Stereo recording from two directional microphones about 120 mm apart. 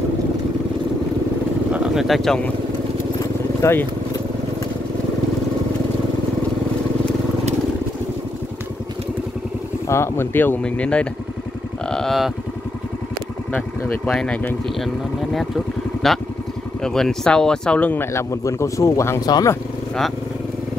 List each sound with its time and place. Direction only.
1.7 s speech: centre (ahead or behind)
3.6 s speech: 20° left (ahead or behind)
9.8 s speech: 20° left (ahead or behind)
11.9 s cattle: centre (ahead or behind)
13.5 s speech: 15° left (ahead or behind)
15.3 s speech: centre (ahead or behind); by 19.5 s 30° left (ahead or behind)